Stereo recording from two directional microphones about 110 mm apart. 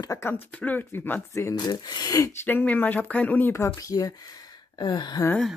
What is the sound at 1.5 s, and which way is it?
Speech, 40° left (ahead or behind).